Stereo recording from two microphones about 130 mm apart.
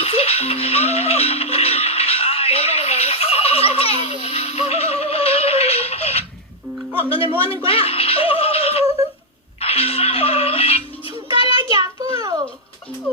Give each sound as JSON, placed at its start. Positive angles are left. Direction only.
{"t": 0.0, "sound": "music", "side_deg": 50}
{"t": 7.4, "sound": "speech", "side_deg": 45}
{"t": 9.6, "sound": "music", "side_deg": 50}
{"t": 11.3, "sound": "child singing", "side_deg": -35}